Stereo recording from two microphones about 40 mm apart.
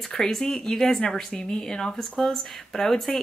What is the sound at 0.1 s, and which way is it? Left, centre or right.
Speech, centre.